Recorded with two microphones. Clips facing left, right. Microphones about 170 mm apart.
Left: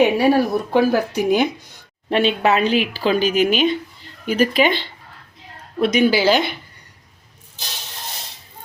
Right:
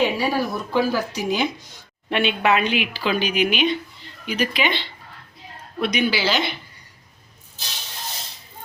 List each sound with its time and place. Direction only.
0.0 s a woman's voice: 60° left (ahead or behind)
2.0 s a woman's voice: 35° left (ahead or behind)